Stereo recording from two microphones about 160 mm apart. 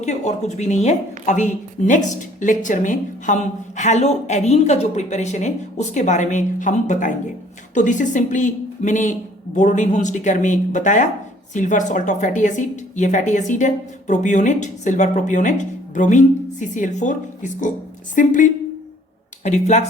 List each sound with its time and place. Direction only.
0.0 s a woman's voice: 45° left (ahead or behind)